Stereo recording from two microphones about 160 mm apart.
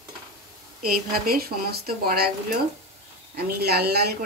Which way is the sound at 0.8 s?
70° right (ahead or behind).